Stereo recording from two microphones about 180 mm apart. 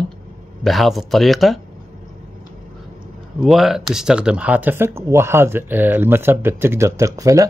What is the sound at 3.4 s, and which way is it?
Speech, centre (ahead or behind).